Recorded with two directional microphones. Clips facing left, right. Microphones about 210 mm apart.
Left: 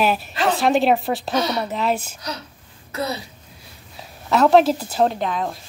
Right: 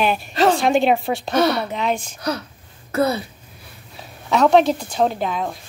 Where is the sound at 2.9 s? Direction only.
55° right (ahead or behind).